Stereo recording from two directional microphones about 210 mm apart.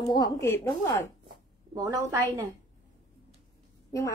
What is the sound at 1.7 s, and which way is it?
Speech, 15° right (ahead or behind).